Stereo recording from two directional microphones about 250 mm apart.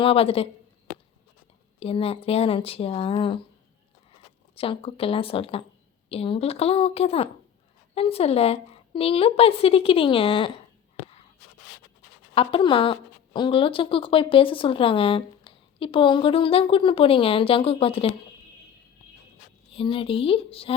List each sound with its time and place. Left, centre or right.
0.0 s speech: left
1.8 s speech: left
4.5 s speech: left
12.3 s speech: left
19.7 s speech: left